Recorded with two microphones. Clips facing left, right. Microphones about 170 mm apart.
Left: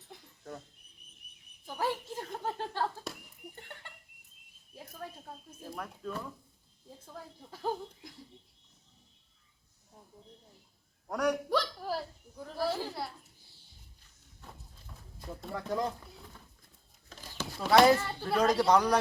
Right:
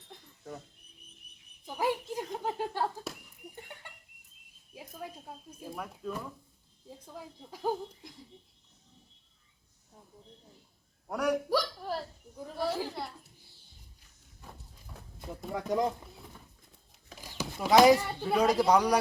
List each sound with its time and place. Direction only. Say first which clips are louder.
0.1 s a sound: right 1 dB; 5° right (ahead or behind)
1.6 s a sound: right 3 dB; 15° right (ahead or behind)
7.0 s speech: right 1 dB; 10° right (ahead or behind)
11.1 s a man's voice: right 1 dB; 10° right (ahead or behind)
11.8 s hiccup: even; 5° left (ahead or behind)
13.0 s a child's voice: even; centre (ahead or behind)
14.4 s a sound: right 1 dB; 10° right (ahead or behind)
15.2 s speech: right 3 dB; 15° right (ahead or behind)
17.1 s speech: right 2 dB; 10° right (ahead or behind)